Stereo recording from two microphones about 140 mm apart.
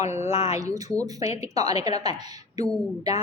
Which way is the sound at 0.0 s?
55° left (ahead or behind).